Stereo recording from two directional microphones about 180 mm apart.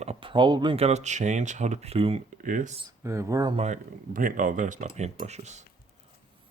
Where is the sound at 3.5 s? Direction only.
40° right (ahead or behind).